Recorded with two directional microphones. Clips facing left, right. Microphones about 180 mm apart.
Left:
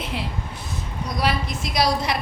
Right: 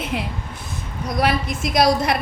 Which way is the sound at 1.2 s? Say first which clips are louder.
Right 4 dB; 50° right (ahead or behind).